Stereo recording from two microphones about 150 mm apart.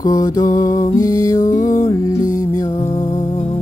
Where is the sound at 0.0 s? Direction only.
25° left (ahead or behind).